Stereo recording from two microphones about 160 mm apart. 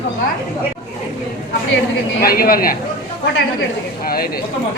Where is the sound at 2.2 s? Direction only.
70° left (ahead or behind).